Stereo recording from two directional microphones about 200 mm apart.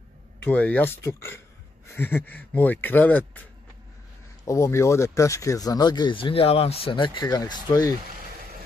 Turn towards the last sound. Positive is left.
turn(degrees=15)  # may be behind; listen again after turning